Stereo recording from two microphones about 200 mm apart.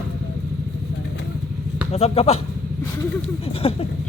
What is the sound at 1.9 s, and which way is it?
Speech, 30° left (ahead or behind).